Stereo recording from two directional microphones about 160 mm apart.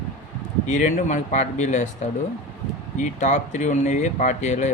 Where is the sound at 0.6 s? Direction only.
50° left (ahead or behind).